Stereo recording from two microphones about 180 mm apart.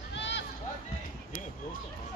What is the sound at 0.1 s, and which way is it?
Run, 80° left.